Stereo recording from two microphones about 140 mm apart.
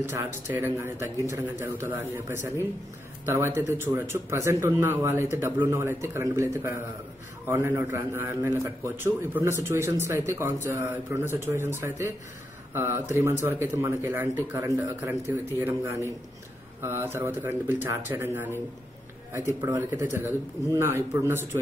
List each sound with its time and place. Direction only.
0.5 s a man's voice: 20° right (ahead or behind)
12.7 s speech: 15° right (ahead or behind)
19.6 s a man's voice: 20° right (ahead or behind)